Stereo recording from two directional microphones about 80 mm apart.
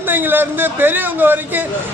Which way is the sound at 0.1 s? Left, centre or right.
Right.